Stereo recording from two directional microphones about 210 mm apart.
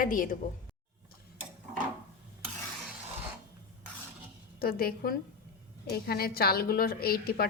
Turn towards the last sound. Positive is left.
turn(degrees=45)  # may be behind; listen again after turning